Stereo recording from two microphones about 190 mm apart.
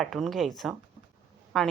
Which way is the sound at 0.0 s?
Centre (ahead or behind).